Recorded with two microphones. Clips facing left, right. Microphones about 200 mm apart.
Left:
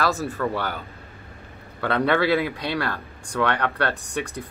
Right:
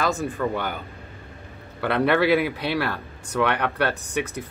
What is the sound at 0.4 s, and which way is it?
Speech, 15° right (ahead or behind).